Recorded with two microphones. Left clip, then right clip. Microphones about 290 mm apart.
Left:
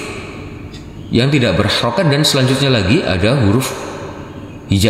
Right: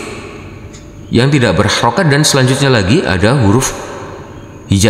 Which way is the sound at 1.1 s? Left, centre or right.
Right.